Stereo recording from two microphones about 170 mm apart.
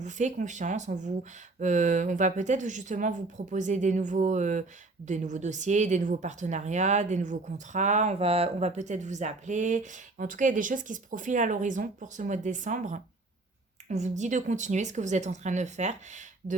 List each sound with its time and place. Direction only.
0.0 s speech: 45° right (ahead or behind)